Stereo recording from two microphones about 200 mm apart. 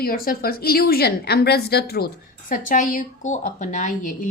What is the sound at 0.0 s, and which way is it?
A woman's voice, 45° left (ahead or behind).